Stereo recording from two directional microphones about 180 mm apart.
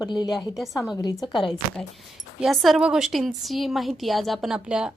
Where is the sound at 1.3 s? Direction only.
Centre (ahead or behind).